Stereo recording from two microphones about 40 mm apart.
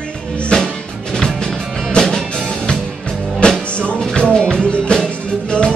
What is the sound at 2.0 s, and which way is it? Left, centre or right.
Music, left.